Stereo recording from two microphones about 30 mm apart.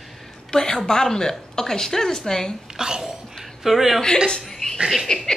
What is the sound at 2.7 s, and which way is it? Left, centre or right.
Whispering, right.